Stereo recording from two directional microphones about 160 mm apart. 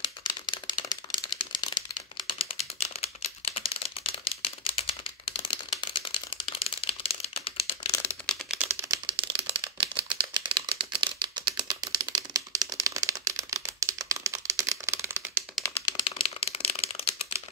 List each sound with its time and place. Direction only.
0.8 s a sound: 30° left (ahead or behind)
2.3 s typing: 40° left (ahead or behind)
7.8 s computer keyboard: 15° left (ahead or behind)
8.5 s typewriter: 10° right (ahead or behind)
8.9 s typewriter: 30° right (ahead or behind); by 15.4 s 15° right (ahead or behind)
16.0 s a sound: 35° left (ahead or behind)